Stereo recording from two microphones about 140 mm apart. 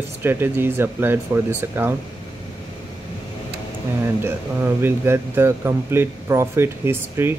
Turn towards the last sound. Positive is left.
turn(degrees=-15)  # may be behind; listen again after turning